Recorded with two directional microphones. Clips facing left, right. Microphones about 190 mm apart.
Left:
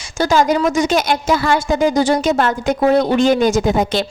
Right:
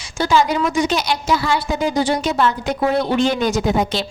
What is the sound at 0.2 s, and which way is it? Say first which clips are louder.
A woman's voice: left 3 dB; 45° left (ahead or behind).